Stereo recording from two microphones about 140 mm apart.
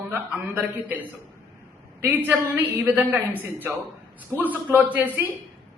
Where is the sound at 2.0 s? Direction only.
15° right (ahead or behind).